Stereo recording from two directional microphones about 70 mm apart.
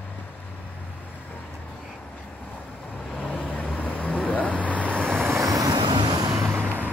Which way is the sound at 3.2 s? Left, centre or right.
Centre.